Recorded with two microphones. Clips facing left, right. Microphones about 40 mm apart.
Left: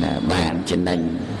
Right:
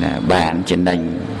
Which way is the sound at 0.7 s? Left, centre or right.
Right.